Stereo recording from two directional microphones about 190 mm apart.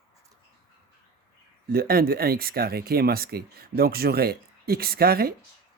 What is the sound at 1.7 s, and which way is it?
Speech, 50° right (ahead or behind).